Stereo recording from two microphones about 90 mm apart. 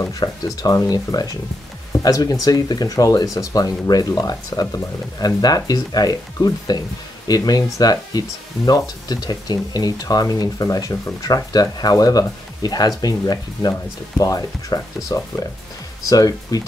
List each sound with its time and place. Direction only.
0.1 s speech: 45° left (ahead or behind)